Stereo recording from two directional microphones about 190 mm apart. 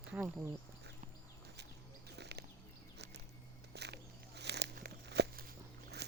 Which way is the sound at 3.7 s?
60° right (ahead or behind).